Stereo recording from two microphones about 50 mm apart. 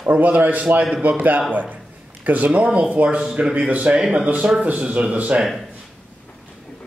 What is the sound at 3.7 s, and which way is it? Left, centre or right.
Speech, right.